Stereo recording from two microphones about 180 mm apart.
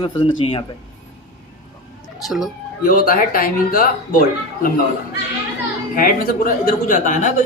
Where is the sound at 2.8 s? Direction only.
55° left (ahead or behind).